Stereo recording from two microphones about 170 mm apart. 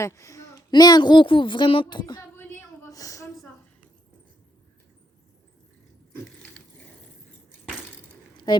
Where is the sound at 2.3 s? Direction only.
15° left (ahead or behind).